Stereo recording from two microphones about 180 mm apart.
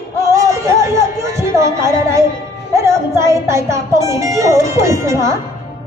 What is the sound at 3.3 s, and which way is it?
A woman's voice, 15° right (ahead or behind).